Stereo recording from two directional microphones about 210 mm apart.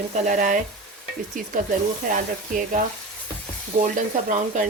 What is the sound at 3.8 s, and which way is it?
Speech, 35° right (ahead or behind).